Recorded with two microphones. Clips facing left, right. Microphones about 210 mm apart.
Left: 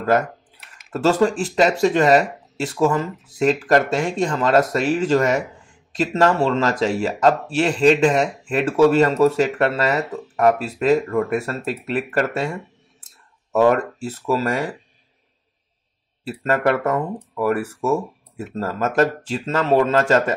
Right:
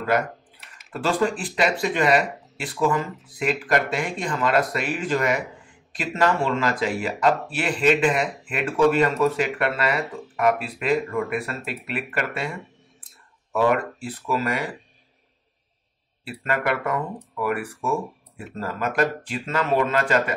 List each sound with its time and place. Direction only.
0.9 s speech: 40° left (ahead or behind)
16.3 s speech: 40° left (ahead or behind)